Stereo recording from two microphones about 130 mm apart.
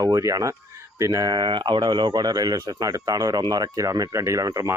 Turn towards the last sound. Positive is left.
turn(degrees=-25)  # may be behind; listen again after turning